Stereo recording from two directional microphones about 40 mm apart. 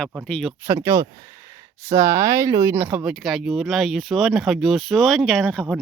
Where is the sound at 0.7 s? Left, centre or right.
Right.